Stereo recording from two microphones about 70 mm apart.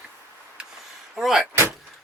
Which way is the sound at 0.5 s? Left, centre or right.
Centre.